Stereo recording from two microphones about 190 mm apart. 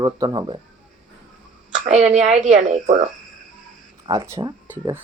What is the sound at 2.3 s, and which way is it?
Speech, 40° right (ahead or behind).